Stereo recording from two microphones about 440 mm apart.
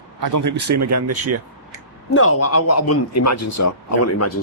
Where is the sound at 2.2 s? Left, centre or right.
Left.